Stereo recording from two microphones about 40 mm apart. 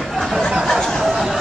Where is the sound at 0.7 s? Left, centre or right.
Centre.